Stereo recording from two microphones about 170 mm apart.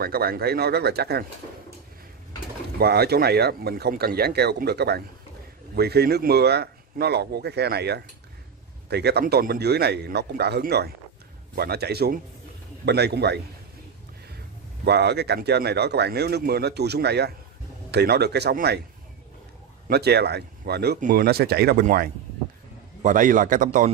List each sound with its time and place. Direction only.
0.0 s speech: 65° right (ahead or behind)
2.8 s speech: 70° right (ahead or behind)
14.9 s speech: 75° right (ahead or behind)
19.9 s speech: 70° right (ahead or behind)
21.0 s a man's voice: 60° right (ahead or behind)